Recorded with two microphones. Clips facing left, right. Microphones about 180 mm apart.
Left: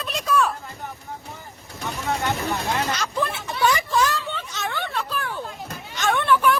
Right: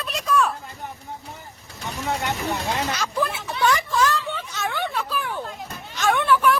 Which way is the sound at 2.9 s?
5° right (ahead or behind).